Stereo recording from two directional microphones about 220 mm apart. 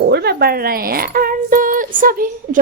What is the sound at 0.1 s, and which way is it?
A woman's voice, 45° right (ahead or behind).